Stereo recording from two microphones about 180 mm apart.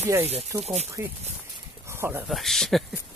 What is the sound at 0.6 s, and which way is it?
Speech, 35° right (ahead or behind).